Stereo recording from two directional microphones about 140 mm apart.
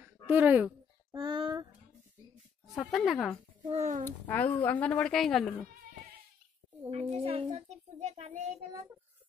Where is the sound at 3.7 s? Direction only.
60° right (ahead or behind).